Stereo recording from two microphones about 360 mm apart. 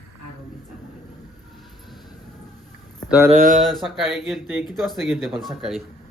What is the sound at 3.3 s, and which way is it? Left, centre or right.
Mantra, right.